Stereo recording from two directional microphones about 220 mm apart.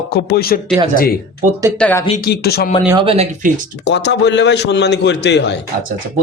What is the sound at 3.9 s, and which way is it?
A man's voice, 50° left (ahead or behind).